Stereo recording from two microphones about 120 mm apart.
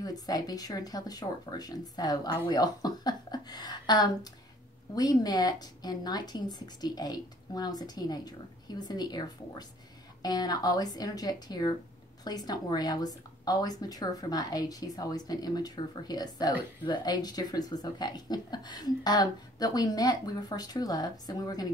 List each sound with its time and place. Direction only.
0.0 s a woman's voice: 30° left (ahead or behind)